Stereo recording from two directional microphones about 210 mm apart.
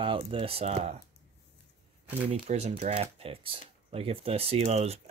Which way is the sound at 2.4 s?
30° right (ahead or behind).